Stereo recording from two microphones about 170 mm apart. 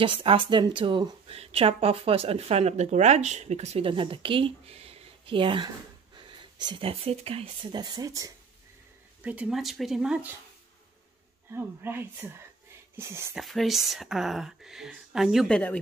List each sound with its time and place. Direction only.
0.0 s speech: 30° right (ahead or behind)
9.2 s speech: 10° right (ahead or behind)
11.5 s speech: 15° right (ahead or behind)
13.3 s speech: centre (ahead or behind)